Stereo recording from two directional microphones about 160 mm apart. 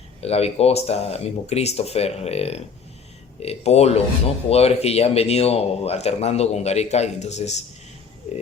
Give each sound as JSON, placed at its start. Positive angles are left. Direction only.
{"t": 0.2, "sound": "speech", "side_deg": 40}